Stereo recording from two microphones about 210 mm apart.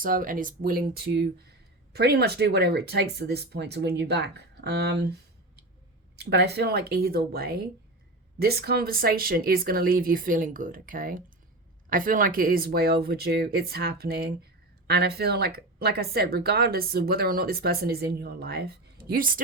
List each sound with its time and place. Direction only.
0.0 s a woman's voice: 40° right (ahead or behind)
6.1 s a woman's voice: 50° right (ahead or behind)